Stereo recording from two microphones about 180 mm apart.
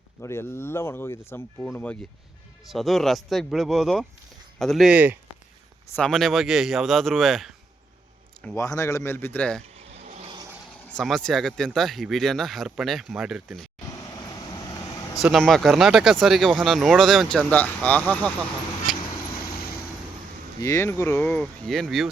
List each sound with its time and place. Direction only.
0.2 s speech: 15° left (ahead or behind)
8.4 s speech: 15° left (ahead or behind)
9.7 s vehicle: 35° right (ahead or behind)
10.9 s speech: 5° left (ahead or behind)
13.9 s vehicle: 20° left (ahead or behind)
15.2 s speech: centre (ahead or behind)
20.6 s speech: 15° left (ahead or behind); by 22.1 s centre (ahead or behind)